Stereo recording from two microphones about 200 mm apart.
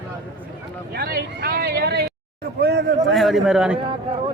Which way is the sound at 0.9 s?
50° right (ahead or behind).